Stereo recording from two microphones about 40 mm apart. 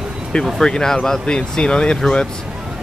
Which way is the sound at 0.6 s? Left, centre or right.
Centre.